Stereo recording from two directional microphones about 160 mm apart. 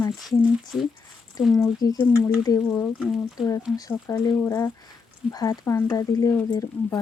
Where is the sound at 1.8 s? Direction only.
20° left (ahead or behind).